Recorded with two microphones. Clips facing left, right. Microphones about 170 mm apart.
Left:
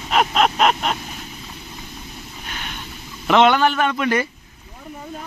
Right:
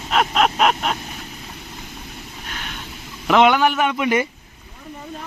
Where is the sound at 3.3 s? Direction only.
5° right (ahead or behind).